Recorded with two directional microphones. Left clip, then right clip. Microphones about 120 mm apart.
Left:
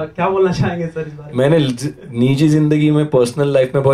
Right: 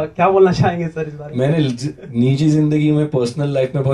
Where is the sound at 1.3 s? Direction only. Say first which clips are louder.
Left 5 dB; 25° left (ahead or behind).